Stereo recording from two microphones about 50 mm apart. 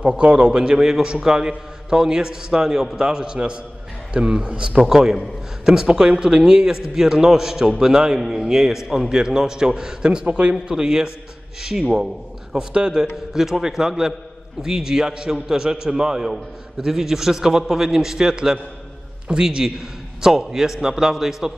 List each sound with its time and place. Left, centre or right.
0.2 s a man's voice: right
4.8 s a man's voice: centre
12.5 s a man's voice: centre